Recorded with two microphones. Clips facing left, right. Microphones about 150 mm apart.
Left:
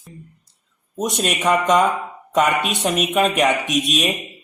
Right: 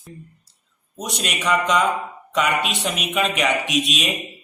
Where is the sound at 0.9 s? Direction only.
50° left (ahead or behind).